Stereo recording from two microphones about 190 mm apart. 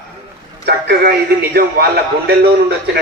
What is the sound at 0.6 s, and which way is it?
Speech, 55° right (ahead or behind).